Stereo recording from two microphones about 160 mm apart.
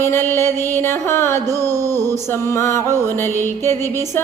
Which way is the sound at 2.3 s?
15° left (ahead or behind).